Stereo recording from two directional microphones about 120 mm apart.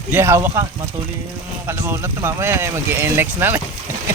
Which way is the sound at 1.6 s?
20° right (ahead or behind).